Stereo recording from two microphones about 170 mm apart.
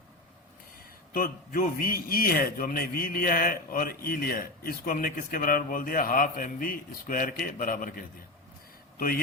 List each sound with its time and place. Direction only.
1.1 s a man's voice: 60° left (ahead or behind)